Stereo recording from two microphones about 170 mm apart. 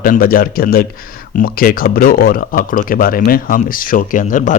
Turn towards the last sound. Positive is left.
turn(degrees=50)  # may be behind; listen again after turning